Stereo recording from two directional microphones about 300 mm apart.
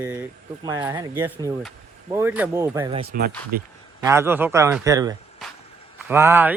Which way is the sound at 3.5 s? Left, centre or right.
Right.